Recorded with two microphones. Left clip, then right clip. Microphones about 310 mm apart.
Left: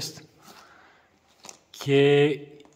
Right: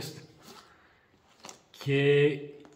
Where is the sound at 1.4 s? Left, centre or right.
Centre.